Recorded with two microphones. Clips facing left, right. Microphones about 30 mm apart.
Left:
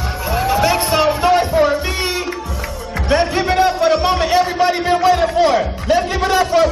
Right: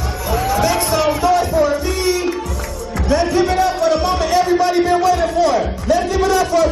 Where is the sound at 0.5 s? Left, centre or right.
Left.